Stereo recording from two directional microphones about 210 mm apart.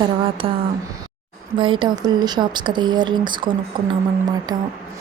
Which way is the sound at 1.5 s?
25° right (ahead or behind).